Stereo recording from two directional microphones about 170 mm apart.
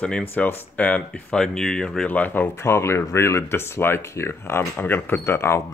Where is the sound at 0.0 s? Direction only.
10° left (ahead or behind).